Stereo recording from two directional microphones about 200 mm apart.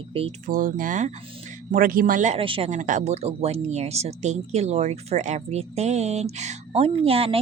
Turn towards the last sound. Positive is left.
turn(degrees=-30)  # may be behind; listen again after turning